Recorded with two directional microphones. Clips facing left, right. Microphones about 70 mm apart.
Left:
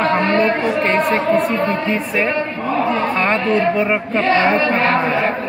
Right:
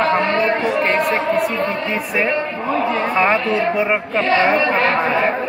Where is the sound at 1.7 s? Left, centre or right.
Centre.